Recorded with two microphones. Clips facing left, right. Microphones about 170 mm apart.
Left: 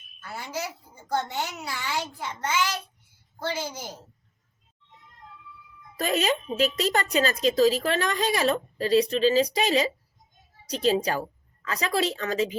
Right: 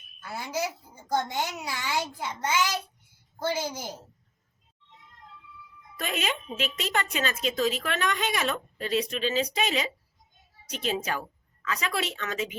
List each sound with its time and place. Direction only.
0.2 s a woman's voice: 10° right (ahead or behind)
6.0 s a woman's voice: 35° left (ahead or behind)